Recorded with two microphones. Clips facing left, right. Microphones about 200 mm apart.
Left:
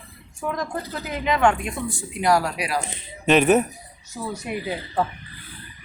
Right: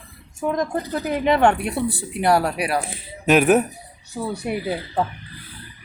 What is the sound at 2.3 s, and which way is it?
Speech, 30° right (ahead or behind).